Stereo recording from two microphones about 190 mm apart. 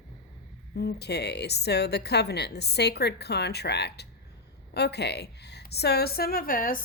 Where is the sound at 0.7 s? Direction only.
60° left (ahead or behind).